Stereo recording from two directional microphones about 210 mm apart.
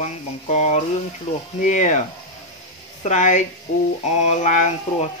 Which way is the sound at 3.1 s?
35° left (ahead or behind).